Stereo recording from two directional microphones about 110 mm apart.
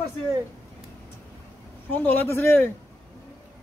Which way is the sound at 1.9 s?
15° left (ahead or behind).